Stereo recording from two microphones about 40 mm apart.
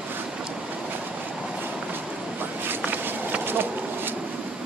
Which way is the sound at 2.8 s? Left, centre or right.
Right.